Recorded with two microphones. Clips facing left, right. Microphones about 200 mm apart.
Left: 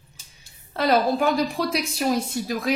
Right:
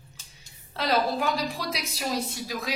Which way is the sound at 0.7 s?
50° left (ahead or behind).